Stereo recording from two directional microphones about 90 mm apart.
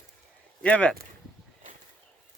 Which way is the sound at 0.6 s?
15° left (ahead or behind).